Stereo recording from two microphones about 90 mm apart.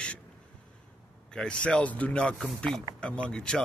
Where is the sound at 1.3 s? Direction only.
10° left (ahead or behind).